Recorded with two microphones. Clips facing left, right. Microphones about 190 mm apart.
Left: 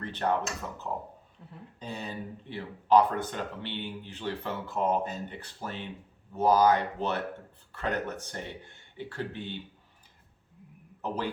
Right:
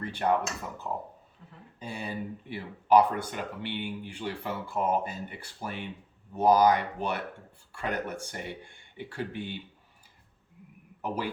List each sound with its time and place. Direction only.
0.0 s speech: 10° right (ahead or behind)
1.8 s speech: 10° right (ahead or behind)
11.0 s a man's voice: 10° right (ahead or behind)